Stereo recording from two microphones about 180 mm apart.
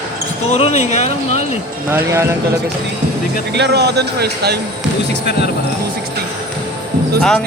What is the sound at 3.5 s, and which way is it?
Speech, 70° right (ahead or behind).